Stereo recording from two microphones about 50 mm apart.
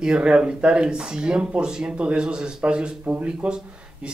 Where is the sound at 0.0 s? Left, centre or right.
Centre.